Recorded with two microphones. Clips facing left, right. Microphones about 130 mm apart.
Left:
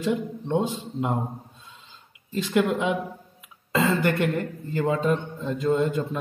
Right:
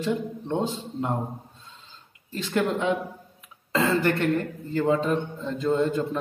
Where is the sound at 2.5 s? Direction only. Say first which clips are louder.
Left 1 dB; 15° left (ahead or behind).